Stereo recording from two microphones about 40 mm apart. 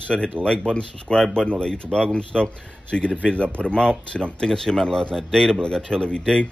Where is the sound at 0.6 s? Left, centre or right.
Centre.